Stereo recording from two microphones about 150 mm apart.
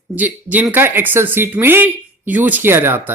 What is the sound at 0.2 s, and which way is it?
Speech, 10° right (ahead or behind).